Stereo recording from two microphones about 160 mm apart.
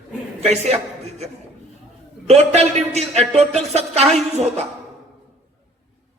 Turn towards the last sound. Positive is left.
turn(degrees=-40)  # may be behind; listen again after turning